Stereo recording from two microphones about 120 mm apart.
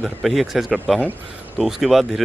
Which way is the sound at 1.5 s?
5° right (ahead or behind).